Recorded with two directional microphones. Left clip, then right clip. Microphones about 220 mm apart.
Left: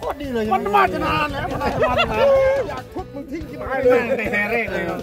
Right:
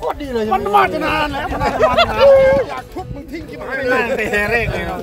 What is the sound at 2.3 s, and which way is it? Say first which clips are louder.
Speech: right 6 dB; 15° left (ahead or behind).